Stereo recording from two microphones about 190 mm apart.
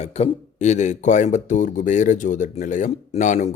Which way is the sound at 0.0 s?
35° left (ahead or behind).